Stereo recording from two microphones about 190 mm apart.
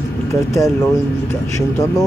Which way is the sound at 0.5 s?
15° left (ahead or behind).